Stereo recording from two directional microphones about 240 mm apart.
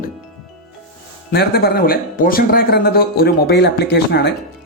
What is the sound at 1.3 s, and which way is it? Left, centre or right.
Speech, left.